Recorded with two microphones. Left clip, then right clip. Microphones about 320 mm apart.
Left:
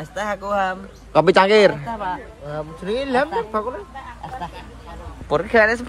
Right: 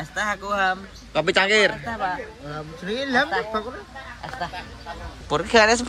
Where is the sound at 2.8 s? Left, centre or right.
Left.